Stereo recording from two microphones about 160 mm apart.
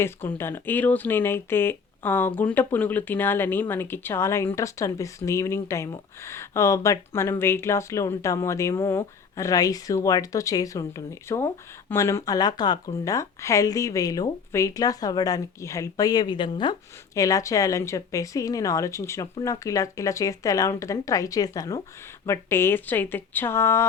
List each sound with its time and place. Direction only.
0.0 s speech: 15° left (ahead or behind)